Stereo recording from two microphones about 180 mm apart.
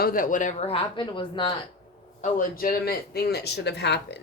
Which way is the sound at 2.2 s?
50° left (ahead or behind).